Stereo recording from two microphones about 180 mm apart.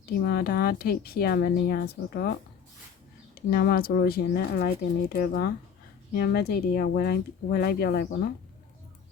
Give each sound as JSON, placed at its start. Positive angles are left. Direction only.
{"t": 0.0, "sound": "speech", "side_deg": 60}
{"t": 3.3, "sound": "speech", "side_deg": 55}